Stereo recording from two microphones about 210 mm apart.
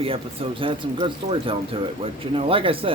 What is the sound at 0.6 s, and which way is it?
Speech, 25° right (ahead or behind).